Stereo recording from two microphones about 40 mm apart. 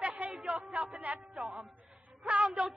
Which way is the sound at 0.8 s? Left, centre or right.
Right.